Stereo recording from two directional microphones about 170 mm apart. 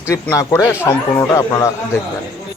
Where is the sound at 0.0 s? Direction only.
15° left (ahead or behind).